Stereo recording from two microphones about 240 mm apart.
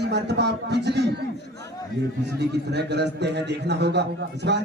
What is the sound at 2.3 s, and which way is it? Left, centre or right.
A man's voice, right.